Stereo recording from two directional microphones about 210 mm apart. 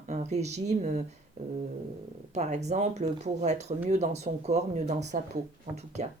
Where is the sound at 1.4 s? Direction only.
35° right (ahead or behind).